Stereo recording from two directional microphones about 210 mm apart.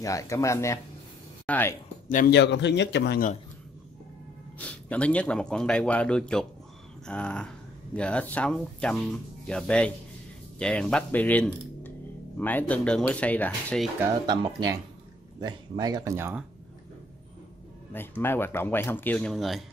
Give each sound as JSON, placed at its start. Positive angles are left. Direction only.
{"t": 0.0, "sound": "speech", "side_deg": 15}
{"t": 2.0, "sound": "a man's voice", "side_deg": 40}
{"t": 2.3, "sound": "a man's voice", "side_deg": 55}
{"t": 4.6, "sound": "speech", "side_deg": 5}
{"t": 14.0, "sound": "speech", "side_deg": -20}
{"t": 17.9, "sound": "speech", "side_deg": 10}